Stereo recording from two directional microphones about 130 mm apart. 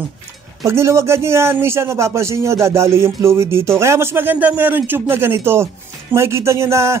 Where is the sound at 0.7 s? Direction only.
20° right (ahead or behind).